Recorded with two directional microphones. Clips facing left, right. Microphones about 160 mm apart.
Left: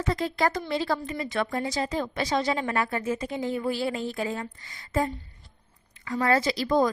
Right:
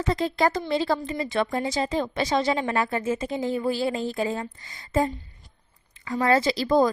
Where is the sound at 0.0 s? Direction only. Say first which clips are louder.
Right 3 dB; 25° right (ahead or behind).